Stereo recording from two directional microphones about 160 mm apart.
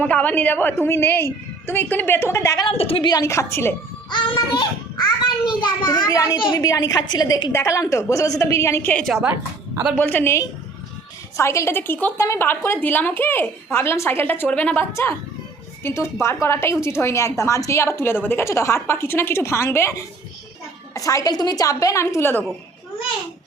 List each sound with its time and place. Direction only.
0.0 s a woman's voice: 10° left (ahead or behind)
2.6 s a woman's voice: 35° left (ahead or behind)
3.1 s a woman's voice: 20° left (ahead or behind)
4.1 s a woman's voice: 30° left (ahead or behind)
8.9 s a woman's voice: 5° left (ahead or behind)
10.0 s a woman's voice: 15° left (ahead or behind)
20.9 s a woman's voice: 20° left (ahead or behind)